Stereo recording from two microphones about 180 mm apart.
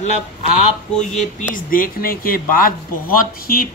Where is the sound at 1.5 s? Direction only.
50° left (ahead or behind).